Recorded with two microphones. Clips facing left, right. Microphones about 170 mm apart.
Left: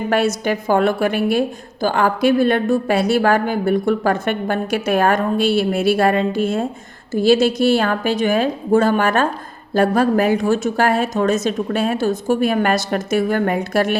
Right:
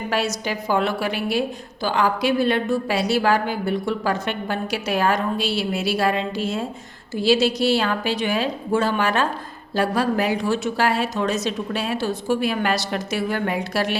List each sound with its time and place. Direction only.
0.1 s a woman's voice: 55° left (ahead or behind)